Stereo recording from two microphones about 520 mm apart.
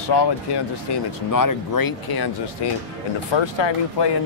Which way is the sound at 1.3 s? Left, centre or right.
Left.